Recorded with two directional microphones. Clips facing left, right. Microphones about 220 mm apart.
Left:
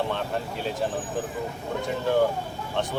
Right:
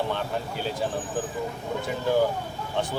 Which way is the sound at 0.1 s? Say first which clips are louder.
Even; centre (ahead or behind).